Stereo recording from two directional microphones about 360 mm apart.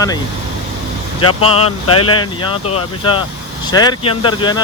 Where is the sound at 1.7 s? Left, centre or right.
Left.